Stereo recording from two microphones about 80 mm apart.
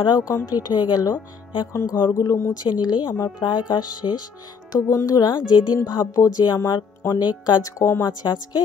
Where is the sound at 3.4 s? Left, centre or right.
Left.